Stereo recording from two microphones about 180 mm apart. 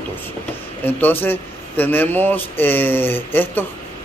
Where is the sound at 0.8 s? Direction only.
10° left (ahead or behind).